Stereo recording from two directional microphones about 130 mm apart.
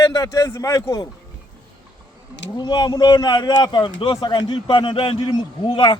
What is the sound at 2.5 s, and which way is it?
Speech, 35° left (ahead or behind).